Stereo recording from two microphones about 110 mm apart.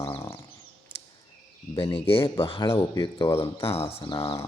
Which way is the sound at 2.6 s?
30° left (ahead or behind).